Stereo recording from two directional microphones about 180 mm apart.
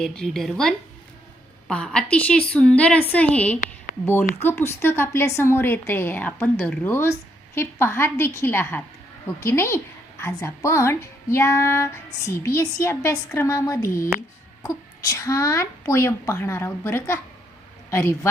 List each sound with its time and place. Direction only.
0.0 s a woman's voice: 5° left (ahead or behind)